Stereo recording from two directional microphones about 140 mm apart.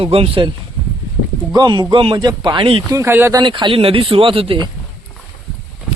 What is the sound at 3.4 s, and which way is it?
Speech, 35° right (ahead or behind).